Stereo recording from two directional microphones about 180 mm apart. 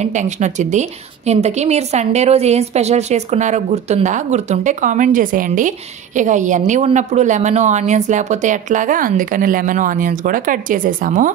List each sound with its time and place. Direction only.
0.0 s a woman's voice: 40° right (ahead or behind)